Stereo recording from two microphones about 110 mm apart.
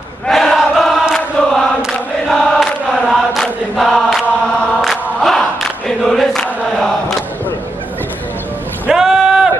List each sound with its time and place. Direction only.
0.3 s chant: centre (ahead or behind)
5.9 s choir: 5° left (ahead or behind)
8.8 s boat: 5° right (ahead or behind)